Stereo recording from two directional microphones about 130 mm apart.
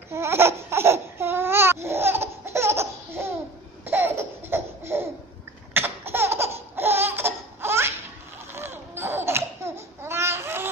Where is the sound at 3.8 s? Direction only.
15° right (ahead or behind).